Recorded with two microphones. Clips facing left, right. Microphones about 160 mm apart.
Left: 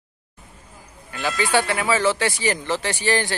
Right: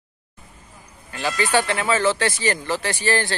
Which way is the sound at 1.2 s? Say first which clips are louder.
Even; 15° left (ahead or behind).